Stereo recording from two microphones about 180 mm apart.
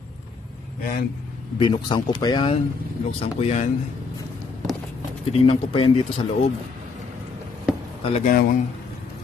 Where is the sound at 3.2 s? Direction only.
35° left (ahead or behind).